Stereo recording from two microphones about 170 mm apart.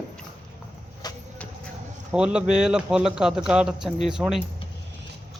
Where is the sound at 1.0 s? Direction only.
25° left (ahead or behind).